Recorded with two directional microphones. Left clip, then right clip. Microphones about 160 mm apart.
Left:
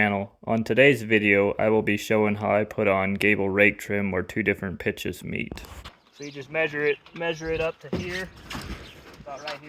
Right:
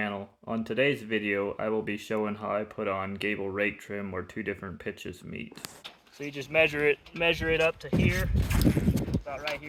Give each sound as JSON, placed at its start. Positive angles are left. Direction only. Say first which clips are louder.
{"t": 0.0, "sound": "speech", "louder": "left 9 dB", "side_deg": 55}
{"t": 6.2, "sound": "speech", "louder": "right 2 dB", "side_deg": -15}
{"t": 7.5, "sound": "speech", "louder": "right 1 dB", "side_deg": -25}